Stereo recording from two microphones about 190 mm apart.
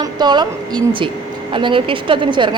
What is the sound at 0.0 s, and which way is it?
A woman's voice, 20° right (ahead or behind).